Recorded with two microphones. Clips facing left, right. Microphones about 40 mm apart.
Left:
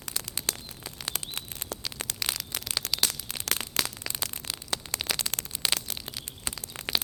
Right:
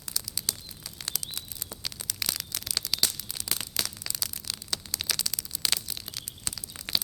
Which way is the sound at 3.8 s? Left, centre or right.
Left.